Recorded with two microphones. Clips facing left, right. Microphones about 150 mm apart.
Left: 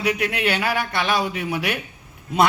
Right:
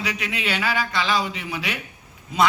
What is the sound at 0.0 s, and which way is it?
A man's voice, 60° left (ahead or behind).